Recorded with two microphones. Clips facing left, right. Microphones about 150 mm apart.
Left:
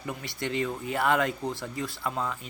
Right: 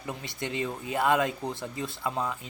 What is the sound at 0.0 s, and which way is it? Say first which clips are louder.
Speech: left 1 dB; 20° right (ahead or behind).